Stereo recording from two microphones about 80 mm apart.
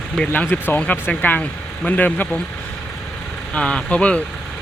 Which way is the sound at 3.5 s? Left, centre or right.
Centre.